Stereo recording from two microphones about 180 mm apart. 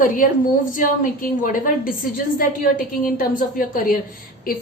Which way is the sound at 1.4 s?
50° left (ahead or behind).